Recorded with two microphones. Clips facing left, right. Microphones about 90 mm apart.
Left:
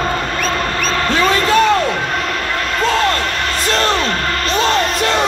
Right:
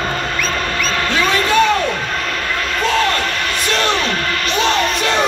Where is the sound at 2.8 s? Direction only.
35° left (ahead or behind).